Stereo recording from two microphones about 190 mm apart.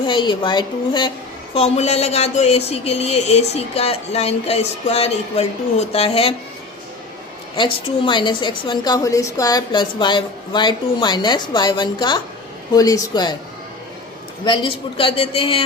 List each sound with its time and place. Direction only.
0.0 s a woman's voice: 25° left (ahead or behind)
7.5 s a woman's voice: 25° left (ahead or behind)
14.4 s a woman's voice: 25° left (ahead or behind)